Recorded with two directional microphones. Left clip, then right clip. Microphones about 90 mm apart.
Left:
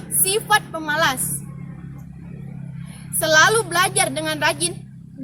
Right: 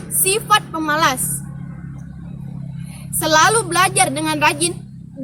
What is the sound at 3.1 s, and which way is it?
Speech, 20° left (ahead or behind).